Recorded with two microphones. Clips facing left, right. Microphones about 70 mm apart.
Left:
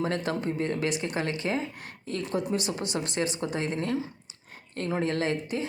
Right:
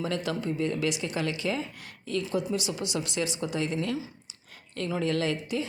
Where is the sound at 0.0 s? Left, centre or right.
Left.